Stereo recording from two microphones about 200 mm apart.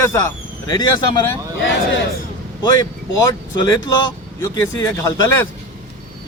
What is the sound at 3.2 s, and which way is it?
A man's voice, 20° left (ahead or behind).